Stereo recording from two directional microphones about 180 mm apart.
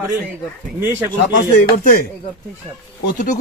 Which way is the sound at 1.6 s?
50° left (ahead or behind).